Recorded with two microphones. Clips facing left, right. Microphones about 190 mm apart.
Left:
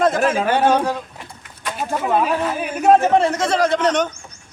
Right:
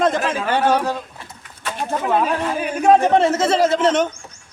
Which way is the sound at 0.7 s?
15° left (ahead or behind).